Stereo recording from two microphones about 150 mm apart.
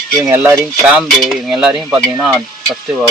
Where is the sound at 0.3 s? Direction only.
20° right (ahead or behind).